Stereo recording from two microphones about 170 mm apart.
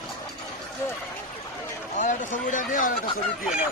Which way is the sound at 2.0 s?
45° left (ahead or behind).